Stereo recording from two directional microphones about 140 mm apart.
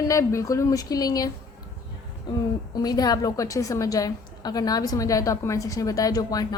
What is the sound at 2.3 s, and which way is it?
A woman's voice, 30° left (ahead or behind).